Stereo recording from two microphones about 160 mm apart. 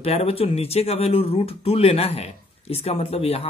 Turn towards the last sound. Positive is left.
turn(degrees=40)  # may be behind; listen again after turning